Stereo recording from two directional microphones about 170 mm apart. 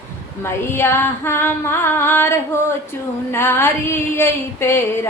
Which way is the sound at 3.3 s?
15° left (ahead or behind).